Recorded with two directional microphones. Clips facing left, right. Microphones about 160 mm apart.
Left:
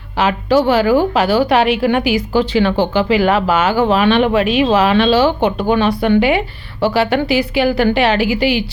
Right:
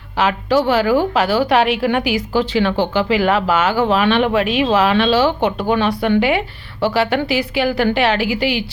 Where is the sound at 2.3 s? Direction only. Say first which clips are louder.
Left 2 dB; 30° left (ahead or behind).